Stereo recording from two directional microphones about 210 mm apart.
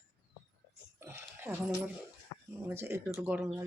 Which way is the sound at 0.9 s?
10° right (ahead or behind).